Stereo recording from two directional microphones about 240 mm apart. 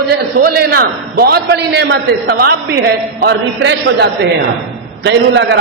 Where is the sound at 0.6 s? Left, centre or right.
Right.